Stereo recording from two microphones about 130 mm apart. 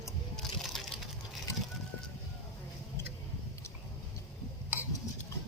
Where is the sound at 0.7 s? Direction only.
5° left (ahead or behind).